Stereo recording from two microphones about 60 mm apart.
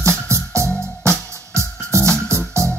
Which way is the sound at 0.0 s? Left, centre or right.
Right.